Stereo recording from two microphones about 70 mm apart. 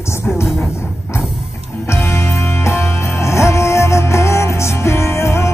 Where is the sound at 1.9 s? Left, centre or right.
Left.